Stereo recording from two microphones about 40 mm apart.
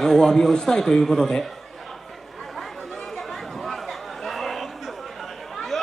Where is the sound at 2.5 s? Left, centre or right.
Centre.